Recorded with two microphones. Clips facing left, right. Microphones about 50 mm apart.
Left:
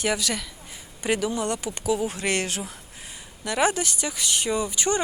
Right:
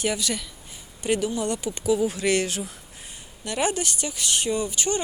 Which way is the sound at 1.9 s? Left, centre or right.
Left.